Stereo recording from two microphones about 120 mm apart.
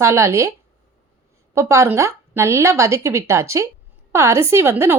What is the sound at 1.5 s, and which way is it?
Speech, 25° right (ahead or behind).